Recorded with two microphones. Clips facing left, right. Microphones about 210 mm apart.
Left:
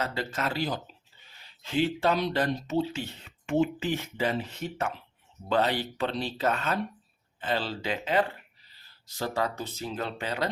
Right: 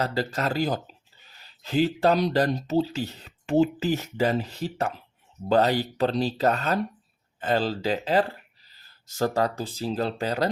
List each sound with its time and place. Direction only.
0.0 s speech: 35° right (ahead or behind)